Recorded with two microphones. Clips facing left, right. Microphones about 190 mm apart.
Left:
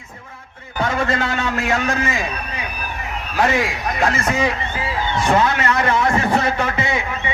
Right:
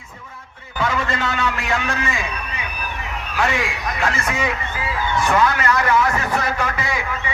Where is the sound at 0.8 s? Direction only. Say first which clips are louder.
Left 2 dB; 45° left (ahead or behind).